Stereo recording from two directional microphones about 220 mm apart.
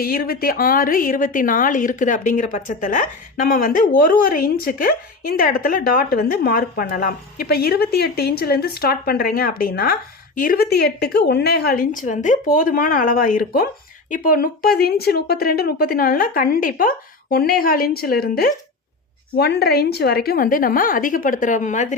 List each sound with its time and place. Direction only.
0.0 s a woman's voice: 40° left (ahead or behind)